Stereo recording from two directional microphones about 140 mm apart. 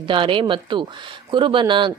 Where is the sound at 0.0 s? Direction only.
35° right (ahead or behind).